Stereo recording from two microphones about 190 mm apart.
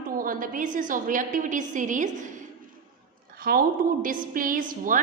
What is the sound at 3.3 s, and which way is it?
A woman's voice, 50° right (ahead or behind).